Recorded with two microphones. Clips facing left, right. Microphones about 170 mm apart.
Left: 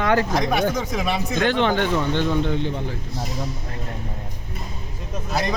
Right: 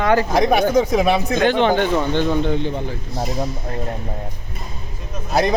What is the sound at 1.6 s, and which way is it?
Speech, 15° right (ahead or behind).